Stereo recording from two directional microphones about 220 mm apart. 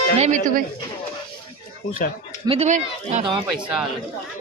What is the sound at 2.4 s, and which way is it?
Speech, 30° right (ahead or behind).